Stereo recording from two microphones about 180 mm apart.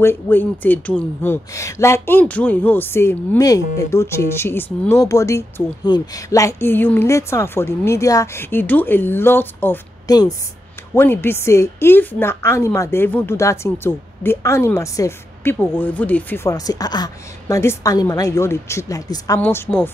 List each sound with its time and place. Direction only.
0.0 s speech: 10° left (ahead or behind)